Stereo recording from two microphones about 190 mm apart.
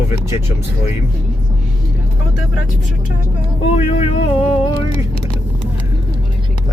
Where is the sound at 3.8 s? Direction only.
35° left (ahead or behind).